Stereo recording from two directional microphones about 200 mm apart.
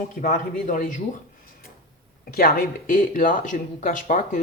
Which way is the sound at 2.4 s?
45° left (ahead or behind).